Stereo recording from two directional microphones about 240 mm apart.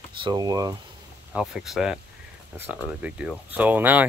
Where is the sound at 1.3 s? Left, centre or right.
Centre.